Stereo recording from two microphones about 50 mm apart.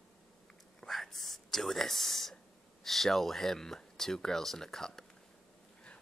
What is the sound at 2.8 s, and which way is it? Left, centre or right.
Speech, centre.